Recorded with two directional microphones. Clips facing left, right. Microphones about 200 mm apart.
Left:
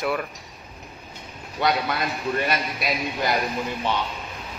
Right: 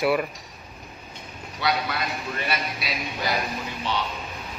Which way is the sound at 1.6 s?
55° left (ahead or behind).